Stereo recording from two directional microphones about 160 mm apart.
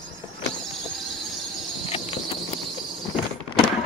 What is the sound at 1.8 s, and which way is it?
Cricket, 35° left (ahead or behind).